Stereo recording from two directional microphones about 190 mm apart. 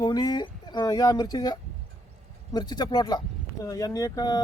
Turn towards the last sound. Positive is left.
turn(degrees=20)  # may be behind; listen again after turning